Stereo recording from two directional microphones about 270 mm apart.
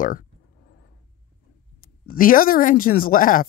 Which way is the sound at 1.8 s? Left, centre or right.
Left.